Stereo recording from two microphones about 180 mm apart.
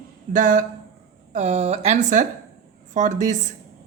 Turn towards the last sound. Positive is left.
turn(degrees=-45)  # may be behind; listen again after turning